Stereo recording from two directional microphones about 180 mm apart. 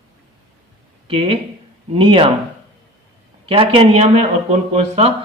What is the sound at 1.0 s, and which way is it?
Speech, 30° right (ahead or behind).